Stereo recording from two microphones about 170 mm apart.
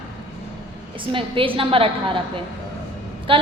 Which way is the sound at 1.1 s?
30° right (ahead or behind).